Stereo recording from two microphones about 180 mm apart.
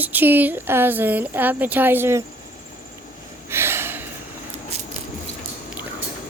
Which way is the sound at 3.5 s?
15° right (ahead or behind).